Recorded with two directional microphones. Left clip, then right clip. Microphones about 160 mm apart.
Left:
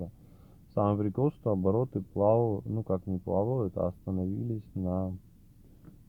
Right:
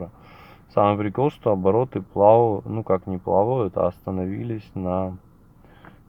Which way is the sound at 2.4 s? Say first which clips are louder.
Right 10 dB; 10° right (ahead or behind).